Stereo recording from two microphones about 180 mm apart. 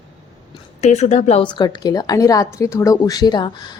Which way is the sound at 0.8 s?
40° left (ahead or behind).